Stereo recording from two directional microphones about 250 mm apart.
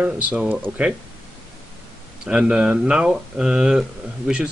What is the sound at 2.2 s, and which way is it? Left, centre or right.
A man's voice, centre.